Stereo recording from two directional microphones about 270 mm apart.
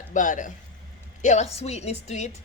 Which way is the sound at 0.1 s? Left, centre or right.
Left.